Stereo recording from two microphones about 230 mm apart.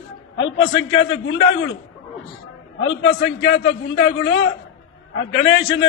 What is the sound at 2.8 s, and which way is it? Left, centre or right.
A man's voice, left.